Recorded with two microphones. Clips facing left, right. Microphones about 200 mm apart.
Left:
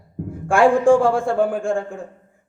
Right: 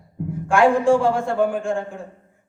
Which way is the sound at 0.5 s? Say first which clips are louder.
Left 2 dB; 50° left (ahead or behind).